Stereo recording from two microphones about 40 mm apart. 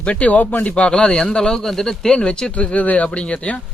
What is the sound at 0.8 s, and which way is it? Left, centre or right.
Speech, left.